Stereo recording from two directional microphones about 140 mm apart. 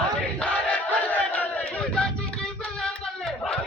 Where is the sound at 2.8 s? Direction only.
5° left (ahead or behind).